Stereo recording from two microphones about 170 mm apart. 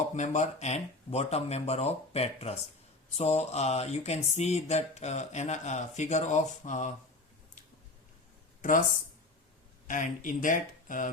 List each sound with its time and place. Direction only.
0.1 s a sound: 40° left (ahead or behind)
8.6 s speech: 50° left (ahead or behind)
9.8 s speech: 50° left (ahead or behind)